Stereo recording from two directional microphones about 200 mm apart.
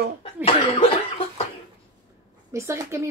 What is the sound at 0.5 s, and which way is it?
Cough, 25° left (ahead or behind).